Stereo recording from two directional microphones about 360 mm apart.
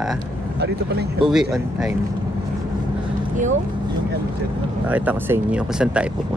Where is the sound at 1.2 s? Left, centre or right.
Centre.